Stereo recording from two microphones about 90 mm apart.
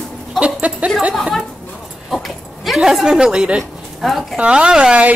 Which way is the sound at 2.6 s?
5° right (ahead or behind).